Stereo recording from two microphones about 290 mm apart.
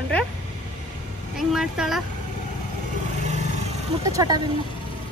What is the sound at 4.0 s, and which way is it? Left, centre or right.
Speech, centre.